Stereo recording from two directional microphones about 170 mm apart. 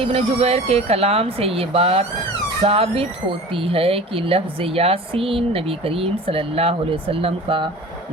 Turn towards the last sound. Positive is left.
turn(degrees=-30)  # may be behind; listen again after turning